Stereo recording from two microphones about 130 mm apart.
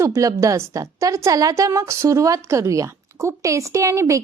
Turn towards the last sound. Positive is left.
turn(degrees=-25)  # may be behind; listen again after turning